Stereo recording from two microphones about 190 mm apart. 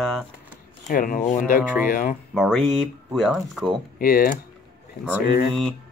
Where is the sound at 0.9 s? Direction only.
45° left (ahead or behind).